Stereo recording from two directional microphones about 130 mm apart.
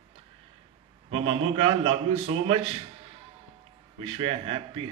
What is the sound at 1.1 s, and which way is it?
A man's voice, 45° right (ahead or behind).